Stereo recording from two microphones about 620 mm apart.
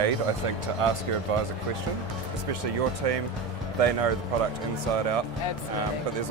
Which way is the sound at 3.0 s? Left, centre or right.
Right.